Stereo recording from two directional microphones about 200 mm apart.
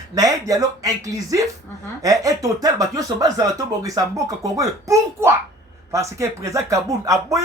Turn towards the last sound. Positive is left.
turn(degrees=-15)  # may be behind; listen again after turning